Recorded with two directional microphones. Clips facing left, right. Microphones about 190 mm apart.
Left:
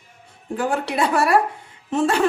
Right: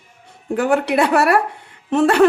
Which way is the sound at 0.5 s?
70° right (ahead or behind).